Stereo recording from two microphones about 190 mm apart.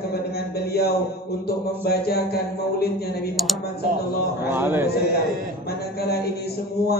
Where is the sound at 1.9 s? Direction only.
55° left (ahead or behind).